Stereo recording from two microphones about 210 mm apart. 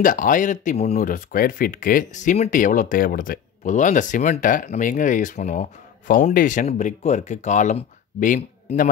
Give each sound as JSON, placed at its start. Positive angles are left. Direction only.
{"t": 0.0, "sound": "speech", "side_deg": 40}